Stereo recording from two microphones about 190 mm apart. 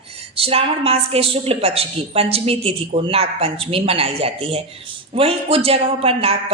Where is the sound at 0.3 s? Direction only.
30° right (ahead or behind).